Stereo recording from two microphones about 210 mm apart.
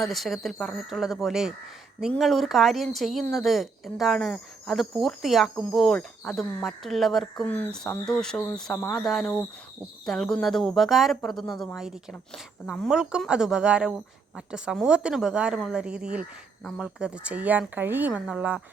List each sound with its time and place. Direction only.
0.0 s speech: centre (ahead or behind)